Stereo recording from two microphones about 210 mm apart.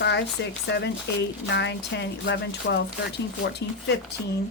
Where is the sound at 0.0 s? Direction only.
55° left (ahead or behind).